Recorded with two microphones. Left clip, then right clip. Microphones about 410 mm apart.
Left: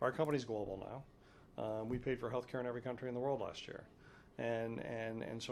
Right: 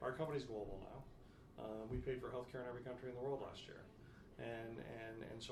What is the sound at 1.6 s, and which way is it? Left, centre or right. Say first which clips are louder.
Speech: left 8 dB; left.